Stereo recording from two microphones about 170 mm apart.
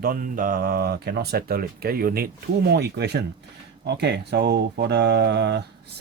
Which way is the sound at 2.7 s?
75° right (ahead or behind).